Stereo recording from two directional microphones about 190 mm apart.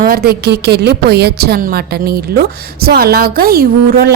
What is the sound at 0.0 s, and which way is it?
A woman's voice, 55° right (ahead or behind).